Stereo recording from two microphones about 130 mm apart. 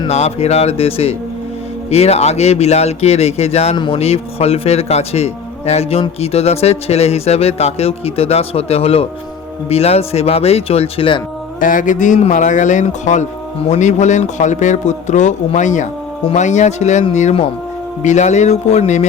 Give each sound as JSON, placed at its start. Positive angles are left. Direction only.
{"t": 0.1, "sound": "a man's voice", "side_deg": 55}
{"t": 11.6, "sound": "a man's voice", "side_deg": 90}